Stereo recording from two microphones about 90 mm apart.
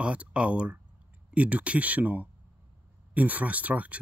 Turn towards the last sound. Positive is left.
turn(degrees=-15)  # may be behind; listen again after turning